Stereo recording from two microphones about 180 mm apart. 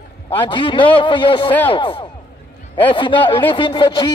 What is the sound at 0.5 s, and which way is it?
Speech, 25° left (ahead or behind).